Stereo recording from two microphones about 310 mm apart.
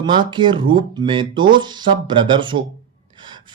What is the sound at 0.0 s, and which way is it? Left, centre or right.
Speech, centre.